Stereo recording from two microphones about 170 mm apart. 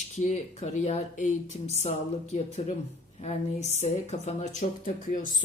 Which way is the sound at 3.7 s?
40° left (ahead or behind).